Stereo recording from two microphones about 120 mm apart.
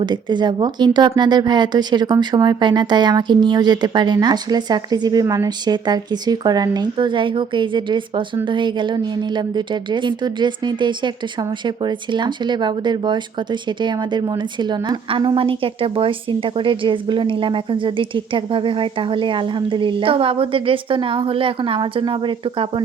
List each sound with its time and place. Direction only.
0.0 s a woman's voice: 40° right (ahead or behind)